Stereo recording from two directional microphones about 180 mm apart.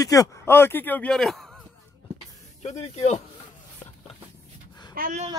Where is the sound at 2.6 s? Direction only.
40° left (ahead or behind).